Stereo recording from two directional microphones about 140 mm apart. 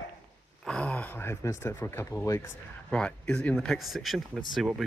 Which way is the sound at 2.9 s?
5° left (ahead or behind).